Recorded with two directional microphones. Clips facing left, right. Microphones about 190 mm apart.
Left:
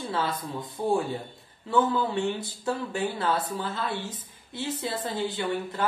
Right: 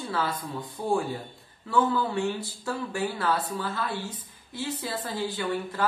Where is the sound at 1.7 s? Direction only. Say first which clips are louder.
Left 1 dB; 20° left (ahead or behind).